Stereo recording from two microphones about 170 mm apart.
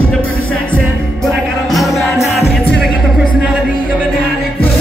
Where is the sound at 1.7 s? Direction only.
Centre (ahead or behind).